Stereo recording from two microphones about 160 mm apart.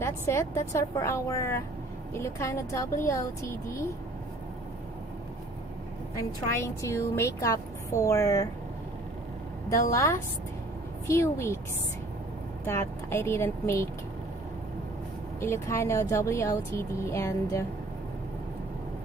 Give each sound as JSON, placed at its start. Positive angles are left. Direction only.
{"t": 0.0, "sound": "a woman's voice", "side_deg": 15}
{"t": 6.5, "sound": "a woman's voice", "side_deg": 15}
{"t": 9.9, "sound": "speech", "side_deg": 20}
{"t": 12.6, "sound": "speech", "side_deg": 15}
{"t": 15.4, "sound": "speech", "side_deg": 15}